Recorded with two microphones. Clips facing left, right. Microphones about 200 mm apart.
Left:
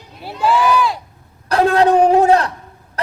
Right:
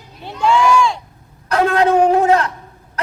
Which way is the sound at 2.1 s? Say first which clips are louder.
Left 2 dB; 35° left (ahead or behind).